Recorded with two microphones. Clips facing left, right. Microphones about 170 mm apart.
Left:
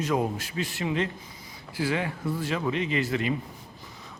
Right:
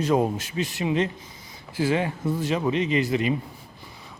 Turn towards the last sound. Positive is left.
turn(degrees=-15)  # may be behind; listen again after turning